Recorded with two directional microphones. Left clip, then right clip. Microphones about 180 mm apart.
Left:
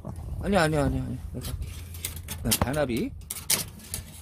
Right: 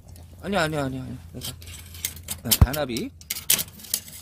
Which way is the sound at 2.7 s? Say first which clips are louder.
Left 1 dB; centre (ahead or behind).